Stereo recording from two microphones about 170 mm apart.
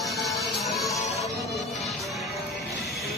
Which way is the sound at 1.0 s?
40° left (ahead or behind).